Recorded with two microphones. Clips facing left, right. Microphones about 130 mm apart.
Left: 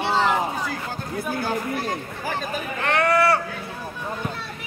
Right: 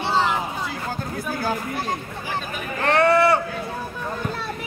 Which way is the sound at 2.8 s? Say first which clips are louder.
Right 3 dB; 30° right (ahead or behind).